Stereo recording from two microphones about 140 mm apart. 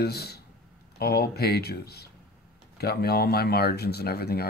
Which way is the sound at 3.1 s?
90° left.